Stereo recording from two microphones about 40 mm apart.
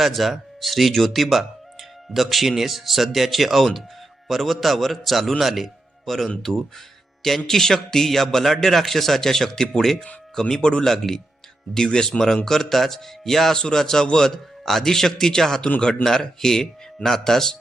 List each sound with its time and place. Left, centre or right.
0.0 s a man's voice: centre; by 10.8 s left
10.8 s a man's voice: centre
11.9 s a man's voice: left